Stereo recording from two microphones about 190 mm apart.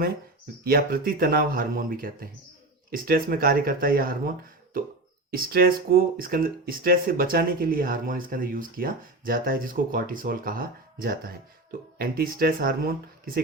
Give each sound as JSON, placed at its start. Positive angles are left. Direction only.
{"t": 0.6, "sound": "speech", "side_deg": -50}